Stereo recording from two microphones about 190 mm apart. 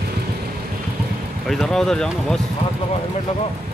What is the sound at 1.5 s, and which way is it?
Speech, centre (ahead or behind).